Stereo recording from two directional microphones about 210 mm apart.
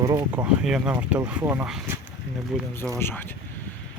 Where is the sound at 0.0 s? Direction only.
20° right (ahead or behind).